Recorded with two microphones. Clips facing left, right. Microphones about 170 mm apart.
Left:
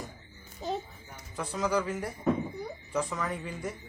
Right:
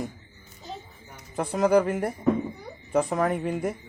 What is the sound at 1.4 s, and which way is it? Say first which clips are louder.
Speech: right 9 dB; 55° right (ahead or behind).